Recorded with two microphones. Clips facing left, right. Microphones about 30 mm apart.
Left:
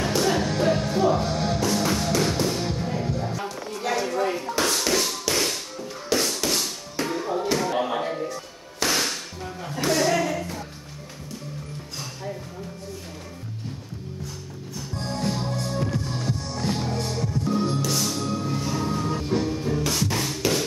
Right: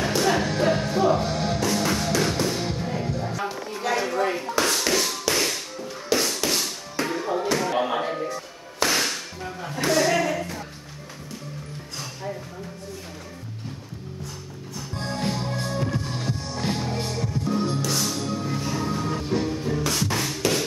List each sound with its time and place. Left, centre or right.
0.0 s music: centre
3.8 s tap: centre
7.5 s music: centre
9.8 s a sound: centre
15.0 s music: right
16.7 s music: centre